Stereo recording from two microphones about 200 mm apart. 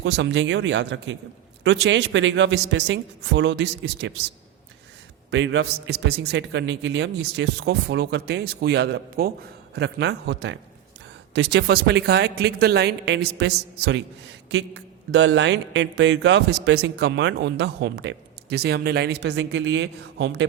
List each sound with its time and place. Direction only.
0.0 s speech: 65° right (ahead or behind)
5.3 s speech: 65° right (ahead or behind)
15.1 s speech: 65° right (ahead or behind)